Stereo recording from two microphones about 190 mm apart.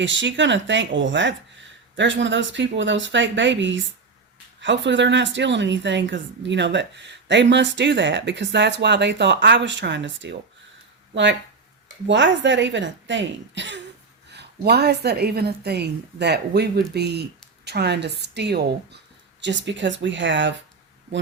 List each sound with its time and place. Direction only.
0.0 s a woman's voice: 75° right (ahead or behind)